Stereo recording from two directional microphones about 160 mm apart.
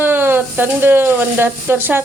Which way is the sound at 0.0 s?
15° right (ahead or behind).